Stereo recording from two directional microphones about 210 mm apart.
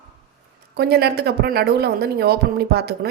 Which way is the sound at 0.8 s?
50° right (ahead or behind).